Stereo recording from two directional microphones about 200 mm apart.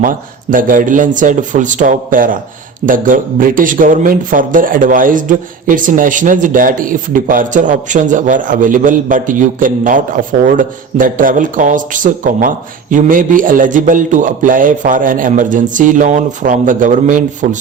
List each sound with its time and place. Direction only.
0.5 s a man's voice: 40° right (ahead or behind)